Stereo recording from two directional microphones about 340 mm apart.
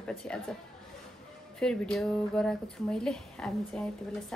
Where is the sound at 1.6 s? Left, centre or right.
Centre.